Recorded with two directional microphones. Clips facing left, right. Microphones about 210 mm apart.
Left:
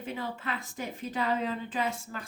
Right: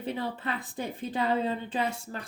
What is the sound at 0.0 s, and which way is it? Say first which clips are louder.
A woman's voice: right 3 dB; 35° right (ahead or behind).